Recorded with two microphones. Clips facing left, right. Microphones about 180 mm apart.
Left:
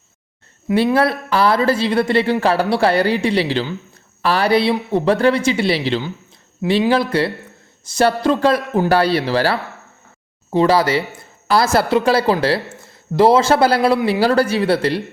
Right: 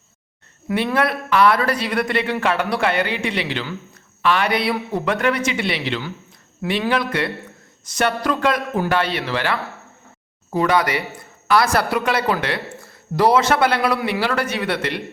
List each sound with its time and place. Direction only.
0.9 s speech: 30° left (ahead or behind)